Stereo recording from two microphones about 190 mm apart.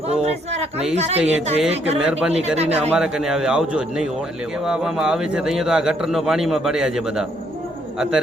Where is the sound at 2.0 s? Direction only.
5° right (ahead or behind).